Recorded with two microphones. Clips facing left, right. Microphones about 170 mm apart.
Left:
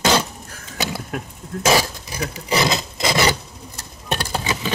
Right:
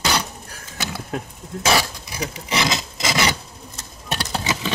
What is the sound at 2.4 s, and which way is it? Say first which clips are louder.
Rub: left 4 dB; 35° left (ahead or behind).